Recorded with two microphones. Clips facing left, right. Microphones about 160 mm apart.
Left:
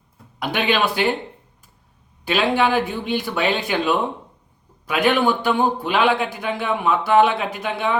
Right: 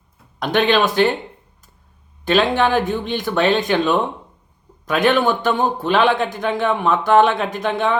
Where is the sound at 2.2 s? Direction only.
10° left (ahead or behind).